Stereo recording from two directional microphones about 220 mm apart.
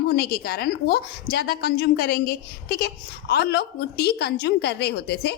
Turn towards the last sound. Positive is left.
turn(degrees=50)  # may be behind; listen again after turning